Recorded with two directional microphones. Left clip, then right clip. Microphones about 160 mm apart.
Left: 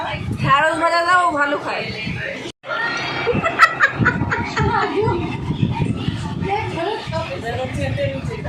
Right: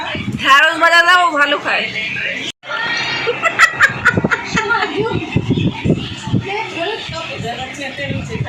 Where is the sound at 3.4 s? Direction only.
15° right (ahead or behind).